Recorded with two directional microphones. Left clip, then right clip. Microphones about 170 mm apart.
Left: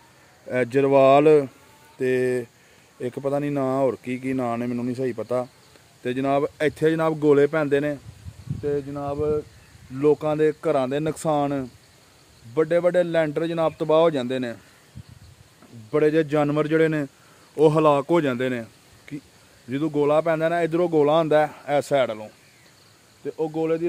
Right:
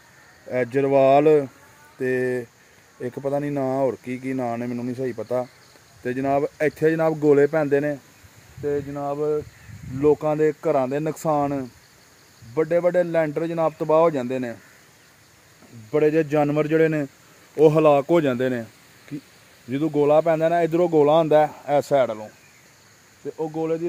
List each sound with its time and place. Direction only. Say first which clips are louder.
0.5 s speech: left 1 dB; 15° left (ahead or behind)
6.0 s a man's voice: even; centre (ahead or behind)
15.9 s a man's voice: right 1 dB; 10° right (ahead or behind); by 22.3 s 30° right (ahead or behind)
23.2 s speech: left 1 dB; centre (ahead or behind)